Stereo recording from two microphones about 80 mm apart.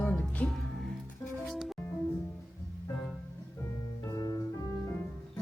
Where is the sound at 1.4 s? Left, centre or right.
Centre.